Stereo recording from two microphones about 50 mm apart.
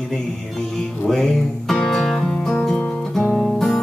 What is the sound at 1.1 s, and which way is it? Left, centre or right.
Music, centre.